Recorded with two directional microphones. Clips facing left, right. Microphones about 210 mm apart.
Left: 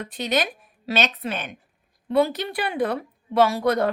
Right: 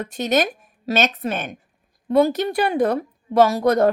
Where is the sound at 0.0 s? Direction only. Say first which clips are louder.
Right 5 dB; 45° right (ahead or behind).